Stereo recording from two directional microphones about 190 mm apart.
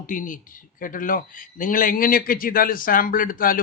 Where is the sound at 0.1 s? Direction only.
45° left (ahead or behind).